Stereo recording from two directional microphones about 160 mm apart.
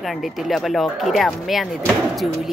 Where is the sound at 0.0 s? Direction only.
Centre (ahead or behind).